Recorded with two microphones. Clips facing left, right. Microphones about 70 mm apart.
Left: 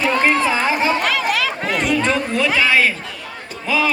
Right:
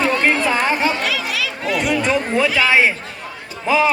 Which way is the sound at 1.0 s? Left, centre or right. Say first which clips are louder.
Left 3 dB; left.